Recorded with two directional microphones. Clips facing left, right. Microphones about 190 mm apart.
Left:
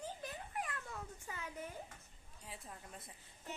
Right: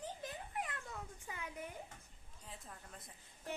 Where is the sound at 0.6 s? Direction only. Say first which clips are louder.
Even; 20° right (ahead or behind).